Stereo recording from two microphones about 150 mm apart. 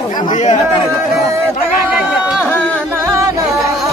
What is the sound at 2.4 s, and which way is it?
Music, 10° left (ahead or behind).